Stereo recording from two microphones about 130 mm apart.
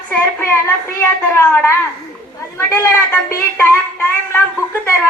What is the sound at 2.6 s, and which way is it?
Speech, 20° left (ahead or behind).